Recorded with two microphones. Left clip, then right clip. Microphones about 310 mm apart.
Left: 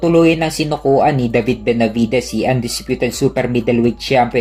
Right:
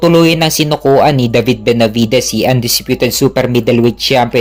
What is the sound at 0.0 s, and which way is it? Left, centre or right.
Speech, right.